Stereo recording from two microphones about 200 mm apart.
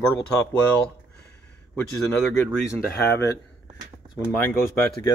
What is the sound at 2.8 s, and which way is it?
Speech, 50° left (ahead or behind).